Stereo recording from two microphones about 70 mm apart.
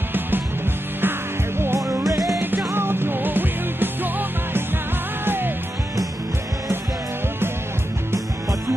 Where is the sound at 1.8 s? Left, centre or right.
Right.